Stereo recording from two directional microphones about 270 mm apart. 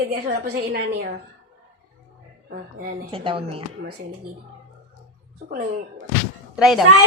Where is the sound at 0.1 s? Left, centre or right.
Right.